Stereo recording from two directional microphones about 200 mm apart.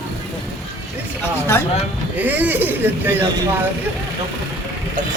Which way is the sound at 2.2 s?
10° right (ahead or behind).